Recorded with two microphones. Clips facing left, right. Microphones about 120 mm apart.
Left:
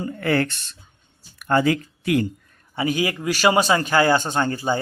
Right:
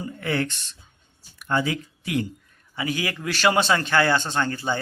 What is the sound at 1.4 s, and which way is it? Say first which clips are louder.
Speech: left 6 dB; 55° left (ahead or behind).